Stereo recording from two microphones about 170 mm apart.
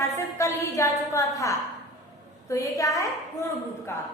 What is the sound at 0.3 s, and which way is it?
A woman's voice, 15° left (ahead or behind).